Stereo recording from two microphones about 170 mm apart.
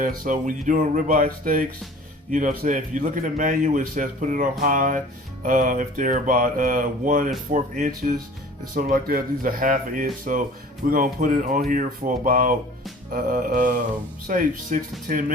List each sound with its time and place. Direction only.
0.0 s a man's voice: 50° right (ahead or behind)